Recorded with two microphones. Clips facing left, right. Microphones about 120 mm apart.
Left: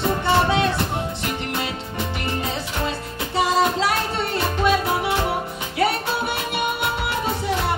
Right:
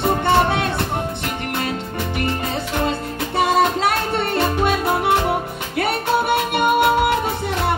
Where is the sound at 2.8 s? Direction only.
55° right (ahead or behind).